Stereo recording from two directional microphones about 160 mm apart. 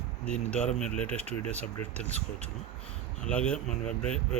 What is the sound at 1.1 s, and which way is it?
Speech, 40° right (ahead or behind).